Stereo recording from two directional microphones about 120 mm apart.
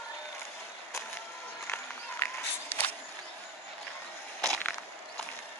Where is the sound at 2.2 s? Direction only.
15° left (ahead or behind).